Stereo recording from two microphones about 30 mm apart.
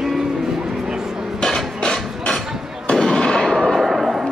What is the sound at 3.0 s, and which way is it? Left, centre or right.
Fireworks, left.